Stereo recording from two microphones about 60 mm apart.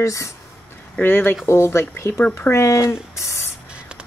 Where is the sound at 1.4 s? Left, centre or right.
Left.